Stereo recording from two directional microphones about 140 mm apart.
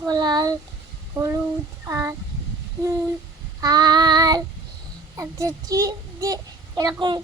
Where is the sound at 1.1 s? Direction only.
20° right (ahead or behind).